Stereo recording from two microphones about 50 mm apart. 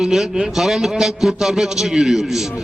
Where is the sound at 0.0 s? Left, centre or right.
Centre.